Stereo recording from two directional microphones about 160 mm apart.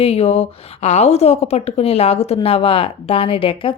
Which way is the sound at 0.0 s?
40° left (ahead or behind).